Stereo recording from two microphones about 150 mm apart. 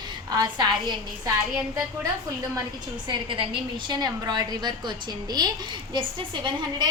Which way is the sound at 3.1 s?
35° right (ahead or behind).